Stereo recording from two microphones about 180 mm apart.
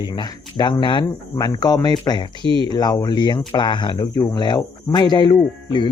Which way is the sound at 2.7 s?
20° left (ahead or behind).